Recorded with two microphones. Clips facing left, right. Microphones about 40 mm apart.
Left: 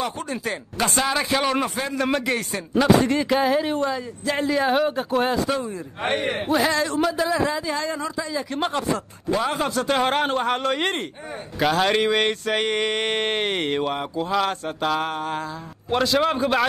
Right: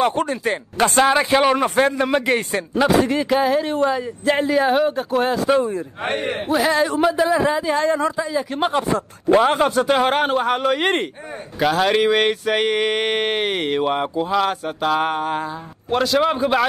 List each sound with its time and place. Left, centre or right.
0.0 s speech: right
1.1 s speech: centre
2.9 s speech: centre
4.2 s speech: right
4.5 s speech: centre
6.7 s speech: centre
8.3 s a sound: centre
8.9 s speech: right
9.8 s a sound: centre
13.8 s a sound: centre
14.3 s a sound: centre
15.0 s speech: centre
15.9 s speech: centre